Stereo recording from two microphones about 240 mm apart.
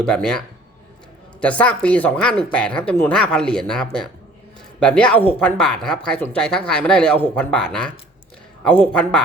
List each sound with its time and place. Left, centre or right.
0.0 s speech: centre